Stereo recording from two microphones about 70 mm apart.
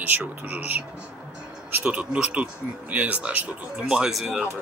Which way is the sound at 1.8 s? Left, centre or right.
Centre.